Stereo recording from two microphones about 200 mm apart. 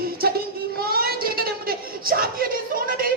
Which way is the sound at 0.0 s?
50° right (ahead or behind).